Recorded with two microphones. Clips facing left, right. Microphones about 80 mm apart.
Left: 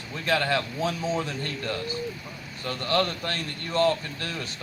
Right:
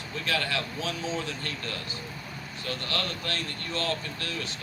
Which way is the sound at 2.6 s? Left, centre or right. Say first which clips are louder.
Left 7 dB; left.